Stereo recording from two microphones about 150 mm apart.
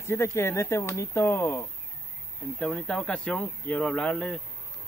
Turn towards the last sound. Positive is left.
turn(degrees=5)  # may be behind; listen again after turning